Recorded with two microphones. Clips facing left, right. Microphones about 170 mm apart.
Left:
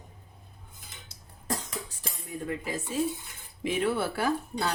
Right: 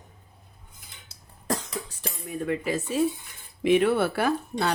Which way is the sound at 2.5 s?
70° right (ahead or behind).